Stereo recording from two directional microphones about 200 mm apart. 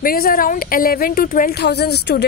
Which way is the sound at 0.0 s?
45° left (ahead or behind).